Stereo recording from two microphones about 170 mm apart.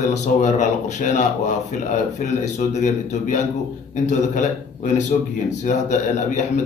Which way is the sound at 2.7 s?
45° left (ahead or behind).